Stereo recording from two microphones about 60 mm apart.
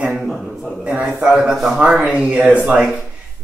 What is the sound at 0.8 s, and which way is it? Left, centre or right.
Speech, centre.